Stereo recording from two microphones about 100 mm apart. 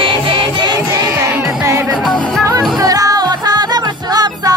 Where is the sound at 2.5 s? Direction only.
35° right (ahead or behind).